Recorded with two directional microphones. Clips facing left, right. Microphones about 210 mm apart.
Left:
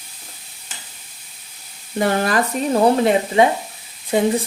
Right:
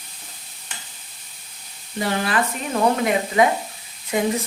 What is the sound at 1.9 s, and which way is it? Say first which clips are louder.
Speech: left 4 dB; 50° left (ahead or behind).